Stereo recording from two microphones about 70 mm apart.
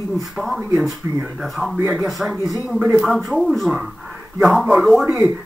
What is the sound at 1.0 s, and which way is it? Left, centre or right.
Speech, right.